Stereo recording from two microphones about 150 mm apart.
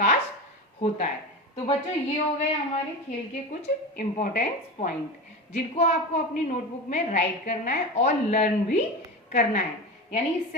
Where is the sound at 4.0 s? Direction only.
55° left (ahead or behind).